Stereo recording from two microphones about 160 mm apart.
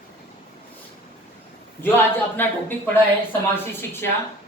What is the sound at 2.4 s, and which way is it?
Speech, 10° left (ahead or behind).